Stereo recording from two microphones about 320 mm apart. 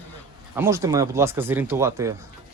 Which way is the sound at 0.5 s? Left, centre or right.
Centre.